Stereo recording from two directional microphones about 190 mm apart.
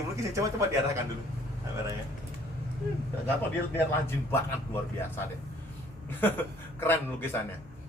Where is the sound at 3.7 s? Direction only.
10° left (ahead or behind).